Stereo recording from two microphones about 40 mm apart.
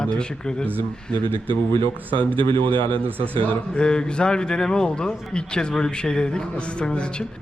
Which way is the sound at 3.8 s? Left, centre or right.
Left.